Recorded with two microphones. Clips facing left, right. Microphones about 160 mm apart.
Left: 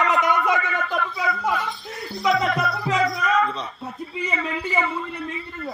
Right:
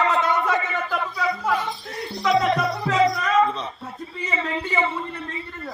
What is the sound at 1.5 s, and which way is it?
Music, 25° right (ahead or behind).